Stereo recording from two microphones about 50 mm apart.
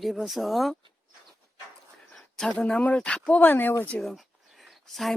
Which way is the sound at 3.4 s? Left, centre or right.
Left.